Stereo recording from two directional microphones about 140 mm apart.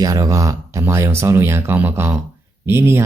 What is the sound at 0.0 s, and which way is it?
Speech, 25° right (ahead or behind).